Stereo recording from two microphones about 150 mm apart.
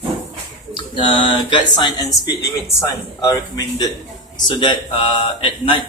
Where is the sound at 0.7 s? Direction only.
35° left (ahead or behind).